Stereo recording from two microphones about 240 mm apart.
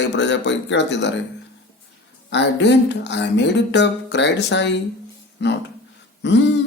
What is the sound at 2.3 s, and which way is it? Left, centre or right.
Speech, left.